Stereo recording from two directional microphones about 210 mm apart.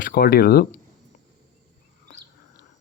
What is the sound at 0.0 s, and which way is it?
Speech, 45° left (ahead or behind).